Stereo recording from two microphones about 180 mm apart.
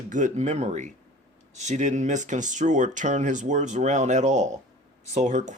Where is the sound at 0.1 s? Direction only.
40° right (ahead or behind).